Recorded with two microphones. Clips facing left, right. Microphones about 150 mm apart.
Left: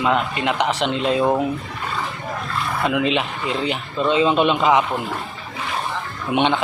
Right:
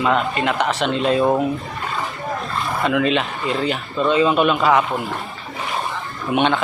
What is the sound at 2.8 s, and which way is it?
Speech, 10° left (ahead or behind).